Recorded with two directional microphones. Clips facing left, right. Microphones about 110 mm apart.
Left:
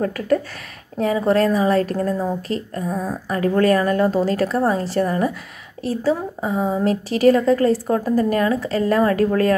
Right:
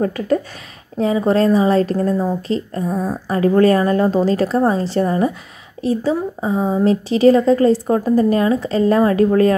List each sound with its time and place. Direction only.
0.0 s a woman's voice: 25° right (ahead or behind)